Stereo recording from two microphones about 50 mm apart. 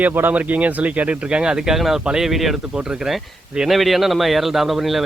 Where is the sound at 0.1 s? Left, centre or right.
Right.